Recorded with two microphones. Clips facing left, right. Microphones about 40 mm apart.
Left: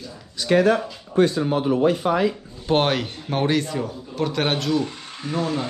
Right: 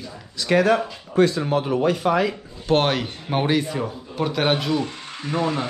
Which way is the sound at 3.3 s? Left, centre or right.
Centre.